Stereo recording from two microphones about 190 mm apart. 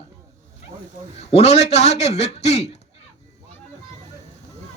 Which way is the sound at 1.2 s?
35° left (ahead or behind).